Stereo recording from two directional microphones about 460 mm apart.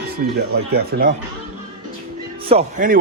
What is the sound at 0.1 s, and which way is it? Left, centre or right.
Speech, right.